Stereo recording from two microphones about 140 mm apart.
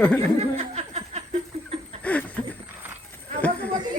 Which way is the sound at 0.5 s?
50° right (ahead or behind).